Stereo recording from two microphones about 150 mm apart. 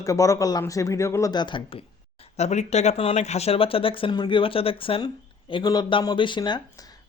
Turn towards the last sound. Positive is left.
turn(degrees=25)  # may be behind; listen again after turning